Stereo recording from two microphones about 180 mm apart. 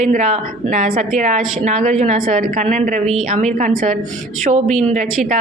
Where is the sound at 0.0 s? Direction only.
40° right (ahead or behind).